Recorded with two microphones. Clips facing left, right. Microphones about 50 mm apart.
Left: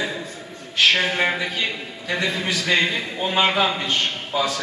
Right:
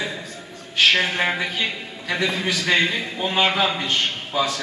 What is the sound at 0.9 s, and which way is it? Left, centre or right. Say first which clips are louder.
Speech: even; centre.